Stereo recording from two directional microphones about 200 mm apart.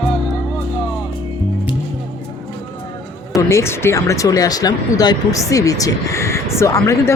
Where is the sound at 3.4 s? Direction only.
15° left (ahead or behind).